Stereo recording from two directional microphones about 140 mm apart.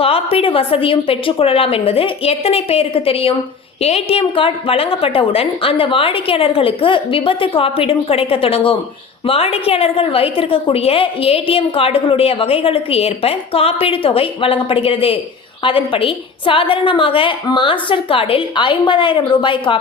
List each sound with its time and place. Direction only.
0.0 s a woman's voice: 45° left (ahead or behind)